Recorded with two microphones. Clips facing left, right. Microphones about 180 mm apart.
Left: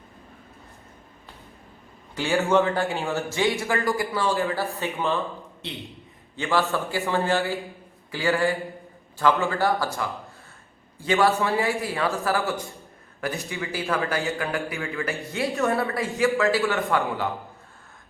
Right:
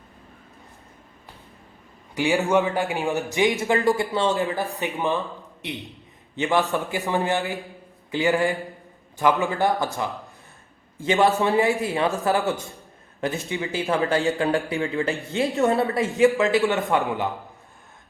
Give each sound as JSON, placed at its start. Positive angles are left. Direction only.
{"t": 2.1, "sound": "a man's voice", "side_deg": -15}